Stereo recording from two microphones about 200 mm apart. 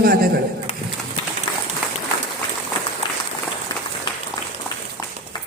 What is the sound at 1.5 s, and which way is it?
Run, 20° left (ahead or behind).